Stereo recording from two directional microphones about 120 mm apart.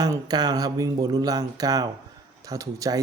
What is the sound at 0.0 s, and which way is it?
Speech, 35° right (ahead or behind).